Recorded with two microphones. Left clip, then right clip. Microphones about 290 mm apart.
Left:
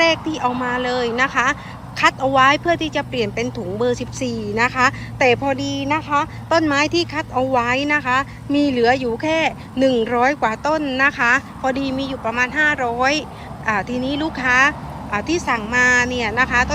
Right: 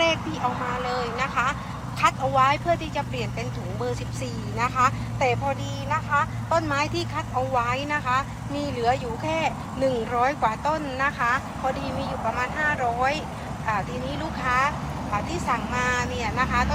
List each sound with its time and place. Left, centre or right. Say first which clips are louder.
0.1 s speech: left 6 dB; left
5.2 s speech: left 8 dB; left